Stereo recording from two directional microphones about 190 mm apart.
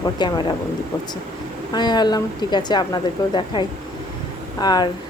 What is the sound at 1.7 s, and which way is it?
Speech, 20° left (ahead or behind).